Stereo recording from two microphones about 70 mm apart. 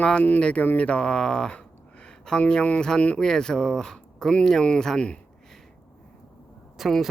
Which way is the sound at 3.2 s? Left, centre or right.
Centre.